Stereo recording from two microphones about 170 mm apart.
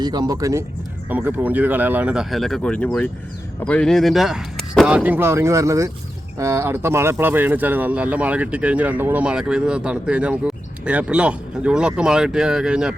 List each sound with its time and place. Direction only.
0.0 s speech: 25° right (ahead or behind); by 13.0 s 5° right (ahead or behind)